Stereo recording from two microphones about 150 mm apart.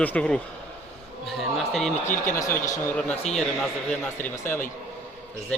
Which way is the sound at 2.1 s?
20° left (ahead or behind).